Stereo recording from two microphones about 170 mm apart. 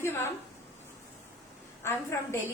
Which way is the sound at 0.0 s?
15° left (ahead or behind).